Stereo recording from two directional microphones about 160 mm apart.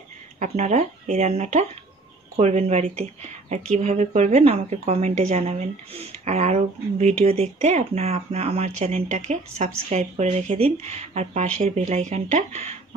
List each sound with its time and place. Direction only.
0.4 s a woman's voice: 45° right (ahead or behind)